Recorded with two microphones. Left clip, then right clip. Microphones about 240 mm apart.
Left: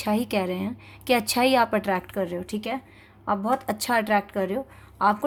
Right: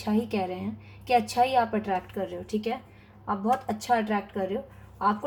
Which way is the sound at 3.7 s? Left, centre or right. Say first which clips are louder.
Left 3 dB; left.